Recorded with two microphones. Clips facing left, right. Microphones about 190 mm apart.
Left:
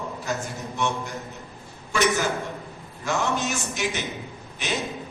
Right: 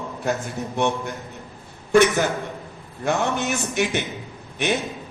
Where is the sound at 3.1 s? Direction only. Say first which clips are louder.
Right 3 dB; 60° right (ahead or behind).